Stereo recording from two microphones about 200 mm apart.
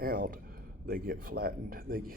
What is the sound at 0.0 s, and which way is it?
Speech, 45° right (ahead or behind).